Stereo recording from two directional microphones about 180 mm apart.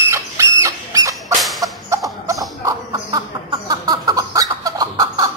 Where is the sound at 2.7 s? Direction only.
20° right (ahead or behind).